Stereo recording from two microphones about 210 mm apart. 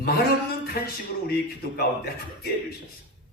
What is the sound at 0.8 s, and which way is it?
A man's voice, 45° left (ahead or behind).